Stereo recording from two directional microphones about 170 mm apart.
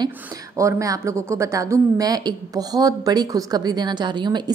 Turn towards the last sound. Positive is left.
turn(degrees=-25)  # may be behind; listen again after turning